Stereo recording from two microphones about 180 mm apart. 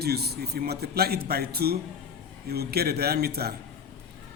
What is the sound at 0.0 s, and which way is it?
Speech, 60° right (ahead or behind).